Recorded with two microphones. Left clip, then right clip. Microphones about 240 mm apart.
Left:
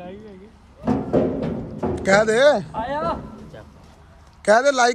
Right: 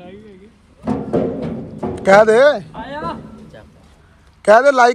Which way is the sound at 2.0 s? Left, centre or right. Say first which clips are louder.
Right 7 dB; centre.